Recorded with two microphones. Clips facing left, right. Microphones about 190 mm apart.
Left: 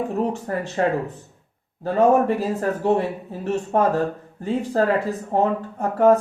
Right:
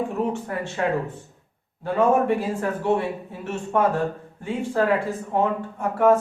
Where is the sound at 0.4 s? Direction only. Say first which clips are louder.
Left 3 dB; 40° left (ahead or behind).